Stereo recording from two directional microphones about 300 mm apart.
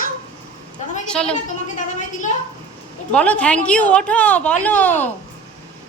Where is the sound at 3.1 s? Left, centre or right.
Centre.